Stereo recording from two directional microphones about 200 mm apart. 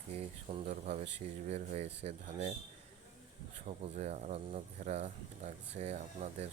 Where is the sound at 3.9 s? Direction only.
35° right (ahead or behind).